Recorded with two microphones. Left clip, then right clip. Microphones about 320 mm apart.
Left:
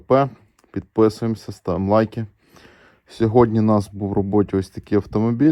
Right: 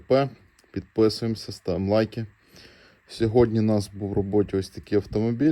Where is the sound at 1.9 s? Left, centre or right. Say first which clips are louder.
Left 6 dB; centre.